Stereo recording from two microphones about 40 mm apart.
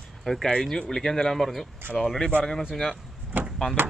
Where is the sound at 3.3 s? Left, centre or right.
Right.